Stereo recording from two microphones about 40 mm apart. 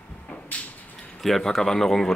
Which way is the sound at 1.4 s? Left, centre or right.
Centre.